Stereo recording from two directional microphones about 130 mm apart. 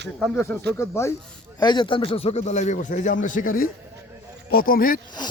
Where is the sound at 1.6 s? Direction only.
35° left (ahead or behind); by 3.6 s 85° left.